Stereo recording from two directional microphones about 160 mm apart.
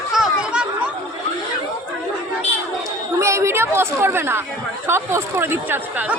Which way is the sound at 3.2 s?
15° right (ahead or behind).